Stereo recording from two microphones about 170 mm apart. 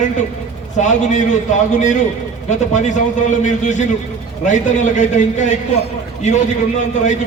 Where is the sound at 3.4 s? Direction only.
45° left (ahead or behind).